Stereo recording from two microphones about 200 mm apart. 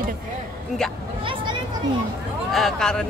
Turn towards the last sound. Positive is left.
turn(degrees=5)  # may be behind; listen again after turning